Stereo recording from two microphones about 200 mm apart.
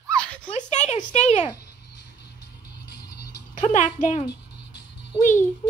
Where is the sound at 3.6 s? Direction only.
35° left (ahead or behind).